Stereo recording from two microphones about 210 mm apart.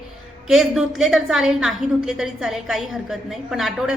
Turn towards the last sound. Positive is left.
turn(degrees=0)  # may be behind; listen again after turning